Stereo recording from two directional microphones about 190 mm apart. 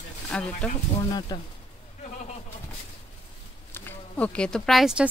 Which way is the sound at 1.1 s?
20° left (ahead or behind).